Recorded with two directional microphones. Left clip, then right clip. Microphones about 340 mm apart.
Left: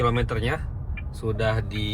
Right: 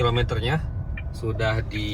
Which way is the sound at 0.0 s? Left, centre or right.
Left.